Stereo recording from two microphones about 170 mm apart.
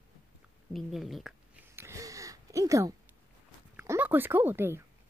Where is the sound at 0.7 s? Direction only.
Centre (ahead or behind).